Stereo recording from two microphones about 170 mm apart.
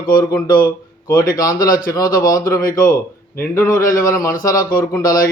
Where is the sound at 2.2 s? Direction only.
20° left (ahead or behind).